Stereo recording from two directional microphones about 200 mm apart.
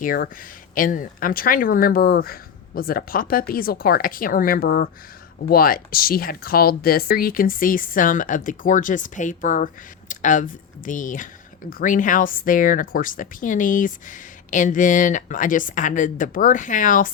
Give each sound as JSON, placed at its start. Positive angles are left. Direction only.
{"t": 0.0, "sound": "speech", "side_deg": 45}